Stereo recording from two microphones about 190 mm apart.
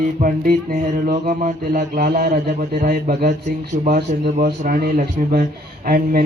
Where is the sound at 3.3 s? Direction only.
40° right (ahead or behind).